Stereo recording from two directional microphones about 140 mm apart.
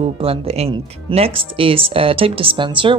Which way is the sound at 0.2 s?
45° right (ahead or behind).